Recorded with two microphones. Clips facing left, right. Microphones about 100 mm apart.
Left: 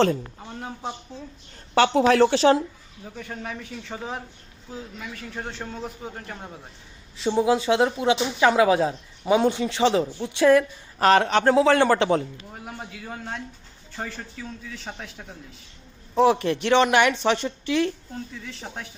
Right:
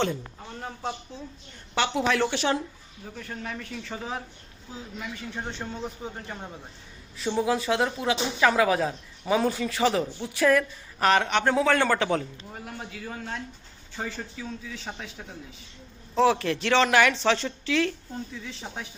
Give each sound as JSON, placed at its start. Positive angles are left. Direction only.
{"t": 0.6, "sound": "a man's voice", "side_deg": 10}
{"t": 1.7, "sound": "a woman's voice", "side_deg": 40}
{"t": 3.2, "sound": "a man's voice", "side_deg": 5}
{"t": 5.5, "sound": "a man's voice", "side_deg": 5}
{"t": 7.2, "sound": "speech", "side_deg": 20}
{"t": 12.6, "sound": "a man's voice", "side_deg": 5}
{"t": 16.1, "sound": "a man's voice", "side_deg": 15}
{"t": 18.6, "sound": "a man's voice", "side_deg": 5}